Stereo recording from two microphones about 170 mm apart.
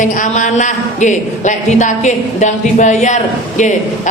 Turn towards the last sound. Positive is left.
turn(degrees=45)  # may be behind; listen again after turning